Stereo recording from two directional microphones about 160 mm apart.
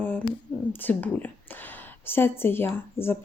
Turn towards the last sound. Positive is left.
turn(degrees=15)  # may be behind; listen again after turning